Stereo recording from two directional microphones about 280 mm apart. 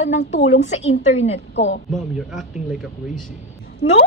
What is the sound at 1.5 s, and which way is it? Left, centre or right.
Speech, left.